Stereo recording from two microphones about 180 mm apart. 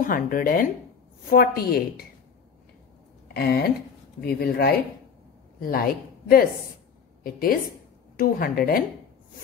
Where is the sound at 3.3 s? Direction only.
60° left (ahead or behind).